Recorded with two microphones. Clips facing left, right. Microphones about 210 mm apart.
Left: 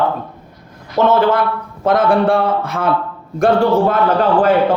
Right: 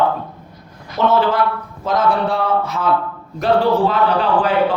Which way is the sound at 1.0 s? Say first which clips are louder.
Left 3 dB; 50° left (ahead or behind).